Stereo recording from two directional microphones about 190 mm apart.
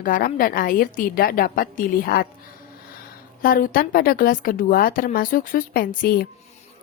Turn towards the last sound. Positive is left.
turn(degrees=50)  # may be behind; listen again after turning